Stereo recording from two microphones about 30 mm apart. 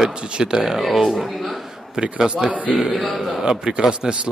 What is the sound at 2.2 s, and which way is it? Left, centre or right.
Speech, right.